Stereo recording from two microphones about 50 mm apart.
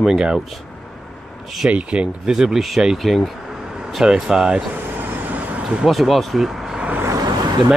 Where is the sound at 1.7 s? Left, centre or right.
Right.